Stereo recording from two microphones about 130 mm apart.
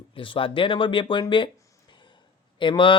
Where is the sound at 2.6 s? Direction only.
40° left (ahead or behind).